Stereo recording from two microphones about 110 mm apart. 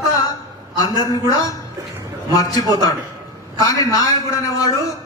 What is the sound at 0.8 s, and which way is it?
A man's voice, 35° left (ahead or behind).